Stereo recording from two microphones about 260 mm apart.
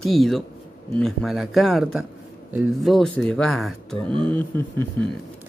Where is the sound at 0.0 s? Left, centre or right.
Centre.